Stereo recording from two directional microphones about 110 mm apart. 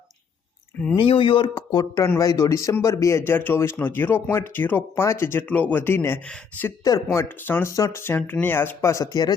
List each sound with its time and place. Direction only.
0.9 s speech: 55° left (ahead or behind)
2.0 s speech: 30° left (ahead or behind)
7.7 s speech: 30° left (ahead or behind)